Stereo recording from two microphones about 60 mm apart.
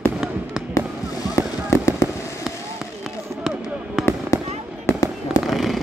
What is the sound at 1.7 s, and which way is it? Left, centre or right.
Fireworks, left.